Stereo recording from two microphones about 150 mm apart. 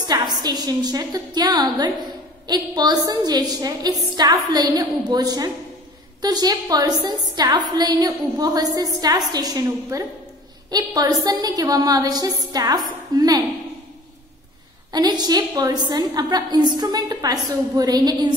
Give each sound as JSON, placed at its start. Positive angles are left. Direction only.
{"t": 0.1, "sound": "a woman's voice", "side_deg": -25}
{"t": 14.9, "sound": "a woman's voice", "side_deg": -25}